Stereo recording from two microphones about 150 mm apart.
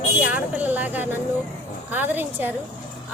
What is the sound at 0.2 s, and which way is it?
A woman's voice, 10° right (ahead or behind).